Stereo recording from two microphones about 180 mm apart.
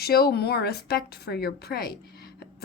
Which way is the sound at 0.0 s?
60° left (ahead or behind).